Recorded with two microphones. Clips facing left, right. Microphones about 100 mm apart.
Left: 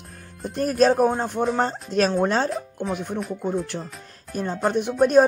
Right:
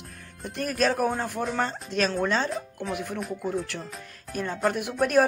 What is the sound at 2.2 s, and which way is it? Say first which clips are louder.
Speech: left 4 dB; 45° left (ahead or behind).